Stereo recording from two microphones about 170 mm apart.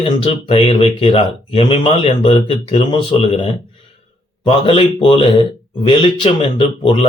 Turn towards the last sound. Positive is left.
turn(degrees=35)  # may be behind; listen again after turning